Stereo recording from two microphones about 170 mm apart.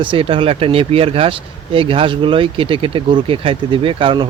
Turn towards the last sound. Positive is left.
turn(degrees=-30)  # may be behind; listen again after turning